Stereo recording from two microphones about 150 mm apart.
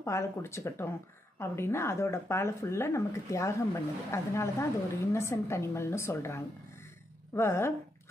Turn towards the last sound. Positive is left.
turn(degrees=15)  # may be behind; listen again after turning